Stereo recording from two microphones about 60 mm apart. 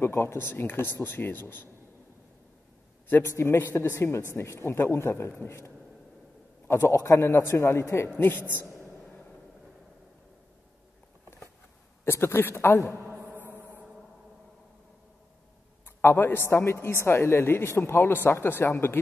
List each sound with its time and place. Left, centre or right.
0.0 s speech: left
3.3 s a man's voice: left
6.7 s a man's voice: left
8.2 s speech: left
9.0 s train: centre
12.0 s a man's voice: left
13.3 s music: right
16.0 s a man's voice: left